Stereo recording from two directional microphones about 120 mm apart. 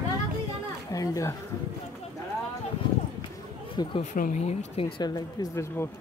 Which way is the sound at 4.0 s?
80° left.